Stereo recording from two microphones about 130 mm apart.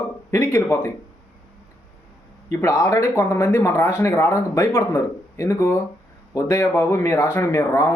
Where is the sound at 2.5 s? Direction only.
25° left (ahead or behind).